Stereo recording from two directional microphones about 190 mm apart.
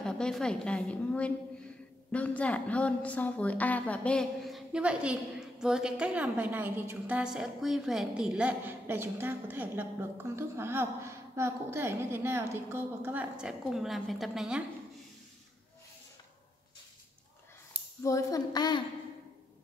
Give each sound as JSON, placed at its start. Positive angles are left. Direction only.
{"t": 0.0, "sound": "a woman's voice", "side_deg": 5}
{"t": 18.0, "sound": "speech", "side_deg": 15}